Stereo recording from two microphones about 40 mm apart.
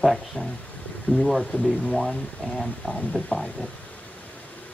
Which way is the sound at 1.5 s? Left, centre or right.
Left.